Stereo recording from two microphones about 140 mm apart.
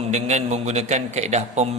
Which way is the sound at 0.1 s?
55° right (ahead or behind).